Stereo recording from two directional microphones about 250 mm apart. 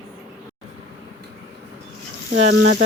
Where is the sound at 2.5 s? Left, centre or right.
Right.